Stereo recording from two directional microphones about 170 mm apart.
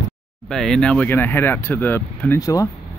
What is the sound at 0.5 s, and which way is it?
Speech, centre (ahead or behind).